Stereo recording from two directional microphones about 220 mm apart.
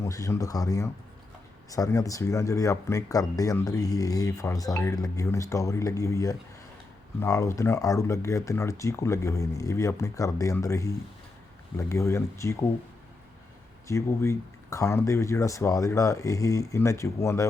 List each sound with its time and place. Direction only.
0.0 s speech: 15° left (ahead or behind)
13.8 s speech: 10° left (ahead or behind)